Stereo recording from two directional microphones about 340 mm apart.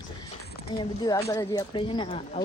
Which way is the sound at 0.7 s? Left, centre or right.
Centre.